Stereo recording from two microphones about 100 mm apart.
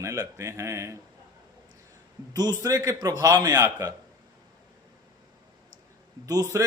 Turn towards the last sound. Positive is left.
turn(degrees=-30)  # may be behind; listen again after turning